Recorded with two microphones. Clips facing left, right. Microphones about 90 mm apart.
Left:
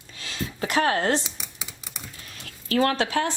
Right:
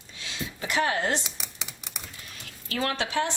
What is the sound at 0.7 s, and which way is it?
Speech, 45° left (ahead or behind).